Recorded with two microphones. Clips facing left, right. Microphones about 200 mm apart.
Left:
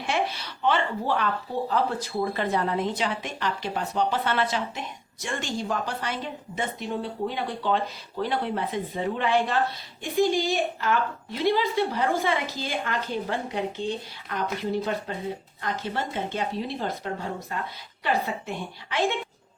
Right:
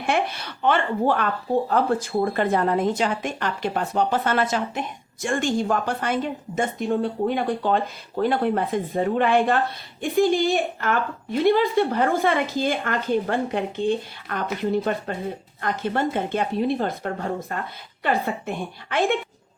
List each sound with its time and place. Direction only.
0.0 s a woman's voice: 55° right (ahead or behind)